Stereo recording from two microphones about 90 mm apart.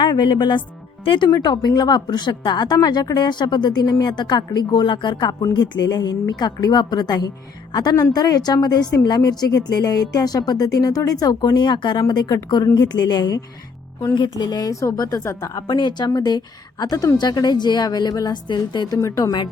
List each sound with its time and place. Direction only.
0.0 s speech: 55° left (ahead or behind)
1.0 s speech: 70° left (ahead or behind)
1.3 s a woman's voice: 50° left (ahead or behind)
15.6 s a woman's voice: 55° left (ahead or behind)
18.9 s a woman's voice: 35° left (ahead or behind)